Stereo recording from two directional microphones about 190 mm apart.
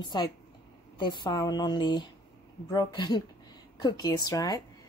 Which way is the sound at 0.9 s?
25° left (ahead or behind).